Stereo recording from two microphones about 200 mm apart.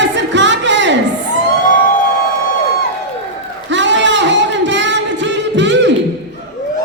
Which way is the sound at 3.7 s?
65° right (ahead or behind).